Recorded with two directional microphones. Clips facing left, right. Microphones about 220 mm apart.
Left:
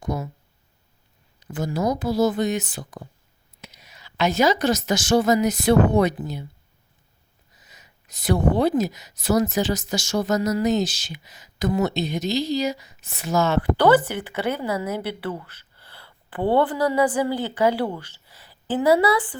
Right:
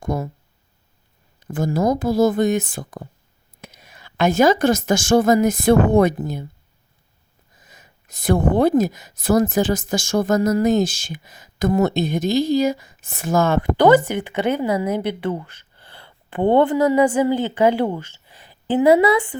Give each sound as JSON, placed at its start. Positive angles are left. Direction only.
{"t": 0.0, "sound": "speech", "side_deg": -50}
{"t": 1.4, "sound": "a woman's voice", "side_deg": -50}
{"t": 7.5, "sound": "speech", "side_deg": -50}
{"t": 13.7, "sound": "speech", "side_deg": -10}
{"t": 15.8, "sound": "a sound", "side_deg": -30}
{"t": 16.4, "sound": "a woman's voice", "side_deg": -20}